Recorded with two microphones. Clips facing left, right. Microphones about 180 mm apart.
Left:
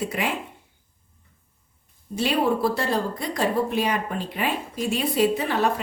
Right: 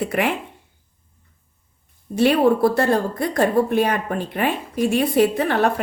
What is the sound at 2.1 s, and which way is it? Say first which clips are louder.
A woman's voice: right 7 dB; 60° right (ahead or behind).